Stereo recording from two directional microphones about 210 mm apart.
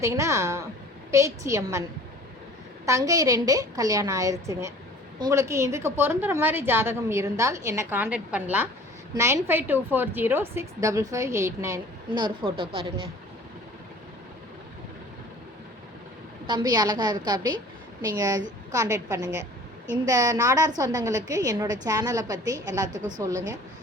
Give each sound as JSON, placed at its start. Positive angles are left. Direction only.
{"t": 0.0, "sound": "a woman's voice", "side_deg": -15}
{"t": 2.8, "sound": "a woman's voice", "side_deg": -15}
{"t": 16.5, "sound": "a woman's voice", "side_deg": -20}
{"t": 22.9, "sound": "a woman's voice", "side_deg": -35}